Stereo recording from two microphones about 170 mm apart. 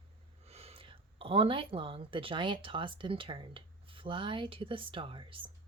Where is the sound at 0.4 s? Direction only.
35° right (ahead or behind).